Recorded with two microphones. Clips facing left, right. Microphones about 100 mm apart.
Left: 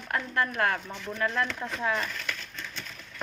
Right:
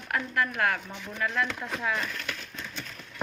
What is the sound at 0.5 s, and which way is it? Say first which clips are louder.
Speech: left 1 dB; 30° left (ahead or behind).